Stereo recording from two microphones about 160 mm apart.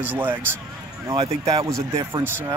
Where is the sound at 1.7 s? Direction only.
20° right (ahead or behind).